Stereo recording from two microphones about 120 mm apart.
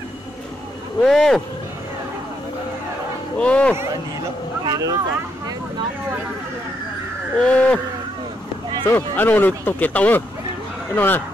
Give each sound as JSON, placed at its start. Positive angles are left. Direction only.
{"t": 1.0, "sound": "speech", "side_deg": 5}
{"t": 3.3, "sound": "speech", "side_deg": 10}
{"t": 4.6, "sound": "vehicle", "side_deg": -30}
{"t": 7.3, "sound": "speech", "side_deg": 10}
{"t": 8.8, "sound": "speech", "side_deg": 15}